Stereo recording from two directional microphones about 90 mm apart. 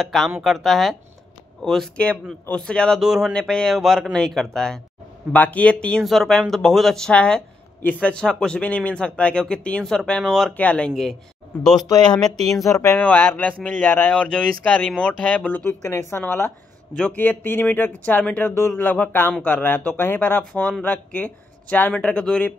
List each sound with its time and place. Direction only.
0.0 s speech: centre (ahead or behind)
3.0 s speech: 5° right (ahead or behind)
3.3 s speech: 10° left (ahead or behind)
5.3 s speech: 15° left (ahead or behind)
11.9 s speech: 50° left (ahead or behind)
12.2 s speech: 5° left (ahead or behind)
12.6 s speech: 35° left (ahead or behind)
12.9 s speech: 20° left (ahead or behind)
15.8 s speech: 30° left (ahead or behind); by 22.5 s 10° left (ahead or behind)